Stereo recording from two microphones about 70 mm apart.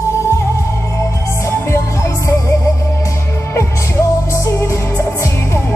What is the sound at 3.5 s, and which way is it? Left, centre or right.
Music, left.